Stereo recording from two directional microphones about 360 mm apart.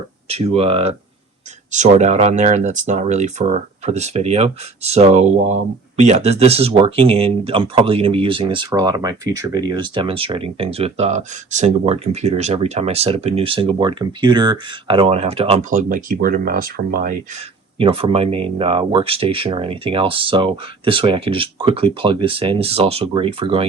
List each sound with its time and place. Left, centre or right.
0.3 s speech: centre